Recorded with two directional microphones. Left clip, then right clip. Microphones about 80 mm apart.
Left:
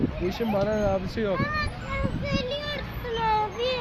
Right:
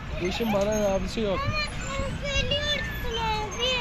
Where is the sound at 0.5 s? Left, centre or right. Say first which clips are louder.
Even; left.